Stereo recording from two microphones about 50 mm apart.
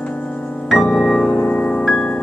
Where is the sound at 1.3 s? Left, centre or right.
Left.